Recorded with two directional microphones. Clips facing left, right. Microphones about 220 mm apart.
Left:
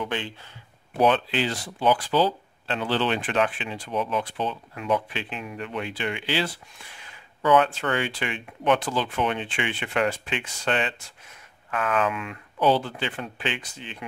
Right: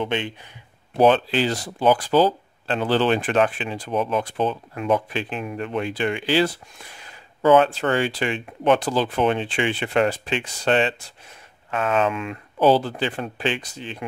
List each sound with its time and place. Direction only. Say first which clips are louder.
0.0 s speech: right 5 dB; 20° right (ahead or behind)
0.9 s speech: right 4 dB; 35° right (ahead or behind)